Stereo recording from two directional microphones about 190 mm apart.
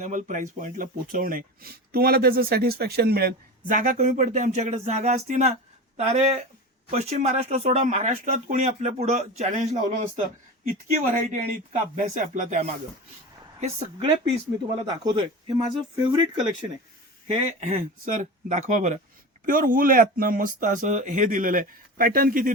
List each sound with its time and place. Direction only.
0.0 s speech: 40° right (ahead or behind)
14.8 s a man's voice: 25° right (ahead or behind)
17.2 s speech: 35° right (ahead or behind)